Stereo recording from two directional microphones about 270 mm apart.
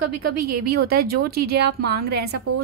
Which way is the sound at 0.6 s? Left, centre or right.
Right.